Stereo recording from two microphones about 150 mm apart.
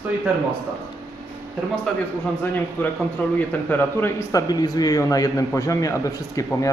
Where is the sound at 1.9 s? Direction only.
5° left (ahead or behind).